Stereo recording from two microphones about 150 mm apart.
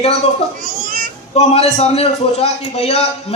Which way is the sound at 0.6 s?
60° right (ahead or behind).